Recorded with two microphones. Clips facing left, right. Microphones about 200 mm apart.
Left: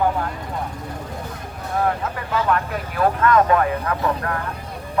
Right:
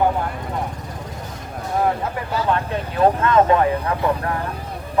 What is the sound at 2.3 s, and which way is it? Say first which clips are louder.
Speech: even; 25° right (ahead or behind).